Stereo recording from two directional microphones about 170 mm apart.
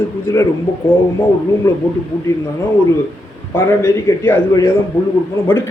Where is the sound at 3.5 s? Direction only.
15° left (ahead or behind).